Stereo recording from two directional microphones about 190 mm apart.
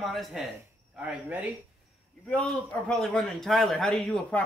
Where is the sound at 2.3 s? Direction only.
5° left (ahead or behind).